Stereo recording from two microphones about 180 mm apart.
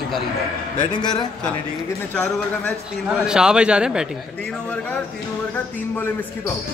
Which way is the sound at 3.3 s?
5° right (ahead or behind).